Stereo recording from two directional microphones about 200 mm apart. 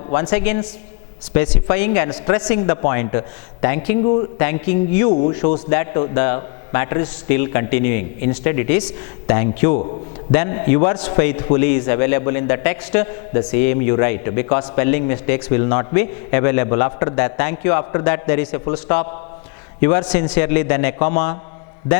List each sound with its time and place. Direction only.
0.1 s a man's voice: 10° left (ahead or behind)